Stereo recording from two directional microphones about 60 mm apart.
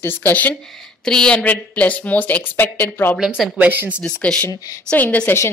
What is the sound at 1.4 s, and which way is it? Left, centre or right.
A woman's voice, left.